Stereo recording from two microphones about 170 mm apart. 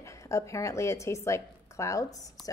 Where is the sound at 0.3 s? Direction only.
15° left (ahead or behind).